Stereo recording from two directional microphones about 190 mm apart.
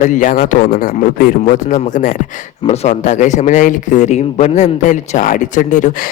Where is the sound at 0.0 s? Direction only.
40° left (ahead or behind).